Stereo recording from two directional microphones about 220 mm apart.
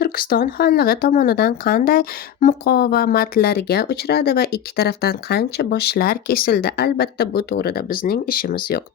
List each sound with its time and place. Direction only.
0.0 s speech: 45° left (ahead or behind)